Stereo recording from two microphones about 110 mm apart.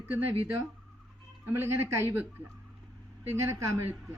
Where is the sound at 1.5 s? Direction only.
25° right (ahead or behind).